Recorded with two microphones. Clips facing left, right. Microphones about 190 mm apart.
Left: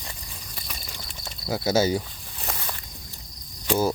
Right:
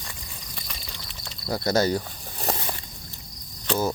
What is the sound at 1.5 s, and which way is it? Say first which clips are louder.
Speech: even; 5° left (ahead or behind).